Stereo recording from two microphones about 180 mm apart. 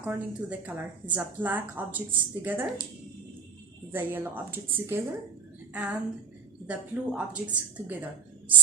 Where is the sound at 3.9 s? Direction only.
10° right (ahead or behind).